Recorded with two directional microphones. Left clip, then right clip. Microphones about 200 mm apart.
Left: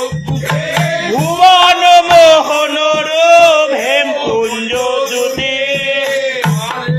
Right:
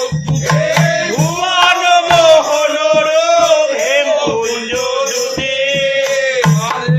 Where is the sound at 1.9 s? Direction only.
40° left (ahead or behind).